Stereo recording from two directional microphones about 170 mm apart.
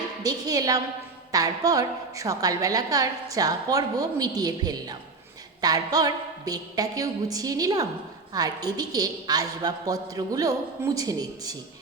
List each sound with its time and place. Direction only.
0.2 s a woman's voice: 20° right (ahead or behind)